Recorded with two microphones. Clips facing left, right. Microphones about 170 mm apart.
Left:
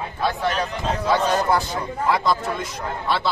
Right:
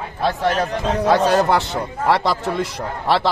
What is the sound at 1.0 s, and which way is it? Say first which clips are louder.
A man's voice: right 5 dB; 80° right.